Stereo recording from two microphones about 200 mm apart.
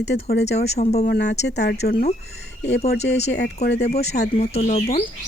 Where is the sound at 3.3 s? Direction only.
55° left (ahead or behind).